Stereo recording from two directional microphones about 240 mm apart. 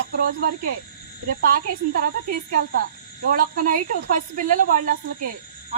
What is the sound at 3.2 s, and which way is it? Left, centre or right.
Speech, right.